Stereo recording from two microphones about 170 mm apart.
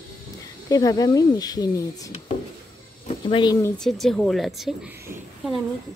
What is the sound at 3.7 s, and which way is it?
Speech, centre (ahead or behind).